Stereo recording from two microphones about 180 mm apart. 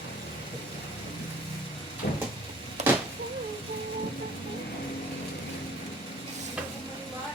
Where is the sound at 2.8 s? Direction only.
40° right (ahead or behind).